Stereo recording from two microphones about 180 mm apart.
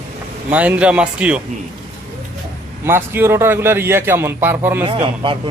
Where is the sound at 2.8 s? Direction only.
15° right (ahead or behind).